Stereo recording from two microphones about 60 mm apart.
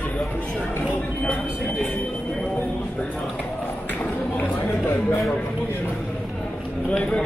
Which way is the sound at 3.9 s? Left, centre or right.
Left.